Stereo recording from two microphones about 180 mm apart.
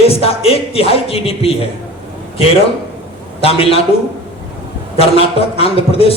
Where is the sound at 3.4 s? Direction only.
30° left (ahead or behind).